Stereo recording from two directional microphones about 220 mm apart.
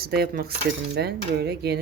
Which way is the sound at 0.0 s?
45° right (ahead or behind).